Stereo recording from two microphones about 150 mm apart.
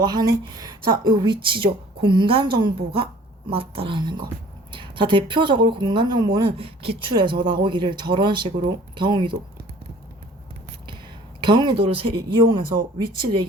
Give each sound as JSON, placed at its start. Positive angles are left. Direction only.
{"t": 0.0, "sound": "speech", "side_deg": -25}
{"t": 11.3, "sound": "speech", "side_deg": -30}